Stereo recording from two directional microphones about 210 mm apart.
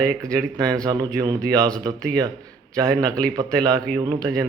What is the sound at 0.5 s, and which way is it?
Speech, 15° right (ahead or behind).